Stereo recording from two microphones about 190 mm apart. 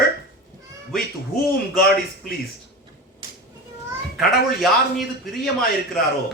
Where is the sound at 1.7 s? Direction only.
55° left (ahead or behind).